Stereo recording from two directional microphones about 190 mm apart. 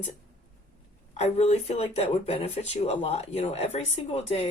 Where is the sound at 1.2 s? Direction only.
35° left (ahead or behind).